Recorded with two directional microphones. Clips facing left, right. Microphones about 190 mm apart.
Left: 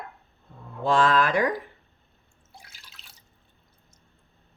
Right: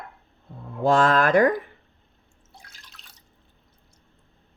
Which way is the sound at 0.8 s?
45° right (ahead or behind).